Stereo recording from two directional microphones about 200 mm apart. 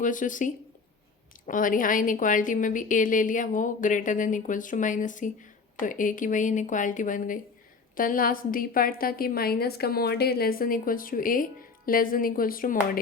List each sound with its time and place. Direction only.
0.0 s a woman's voice: 40° left (ahead or behind)